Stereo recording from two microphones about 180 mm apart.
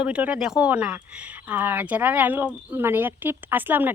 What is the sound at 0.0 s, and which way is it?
Speech, 5° right (ahead or behind).